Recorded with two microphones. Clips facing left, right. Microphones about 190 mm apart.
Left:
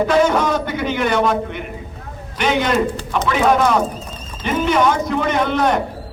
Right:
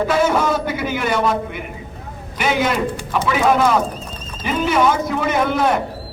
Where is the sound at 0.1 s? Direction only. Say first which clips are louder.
Left 2 dB; 5° right (ahead or behind).